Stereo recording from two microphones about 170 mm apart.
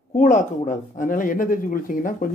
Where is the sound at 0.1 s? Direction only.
50° left (ahead or behind).